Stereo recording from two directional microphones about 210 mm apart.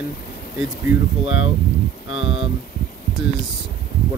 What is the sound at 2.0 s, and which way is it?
Speech, 70° left (ahead or behind).